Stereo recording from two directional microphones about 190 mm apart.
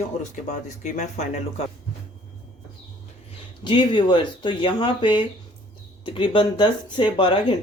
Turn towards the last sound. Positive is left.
turn(degrees=25)  # may be behind; listen again after turning